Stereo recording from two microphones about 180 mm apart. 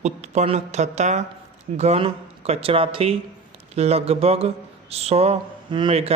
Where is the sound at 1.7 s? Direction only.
35° right (ahead or behind).